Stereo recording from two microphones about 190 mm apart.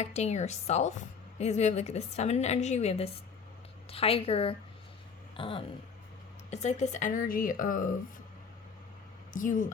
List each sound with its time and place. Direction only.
0.0 s a woman's voice: 35° left (ahead or behind)
9.3 s a woman's voice: 45° left (ahead or behind)